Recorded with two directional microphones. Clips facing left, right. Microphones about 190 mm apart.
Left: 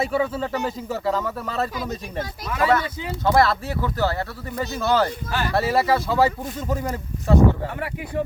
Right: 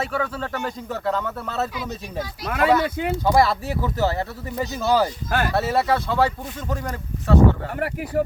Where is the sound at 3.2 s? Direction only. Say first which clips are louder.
Left 1 dB; 15° right (ahead or behind).